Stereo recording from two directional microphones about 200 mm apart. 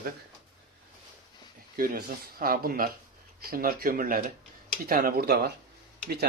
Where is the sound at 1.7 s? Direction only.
45° right (ahead or behind).